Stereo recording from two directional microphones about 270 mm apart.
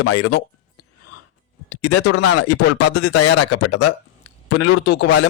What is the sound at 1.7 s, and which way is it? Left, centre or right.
Speech, left.